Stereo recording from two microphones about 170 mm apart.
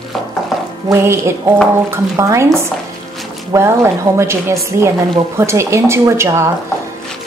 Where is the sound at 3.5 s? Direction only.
15° right (ahead or behind).